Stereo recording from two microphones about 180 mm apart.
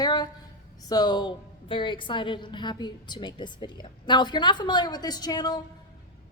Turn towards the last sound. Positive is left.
turn(degrees=20)  # may be behind; listen again after turning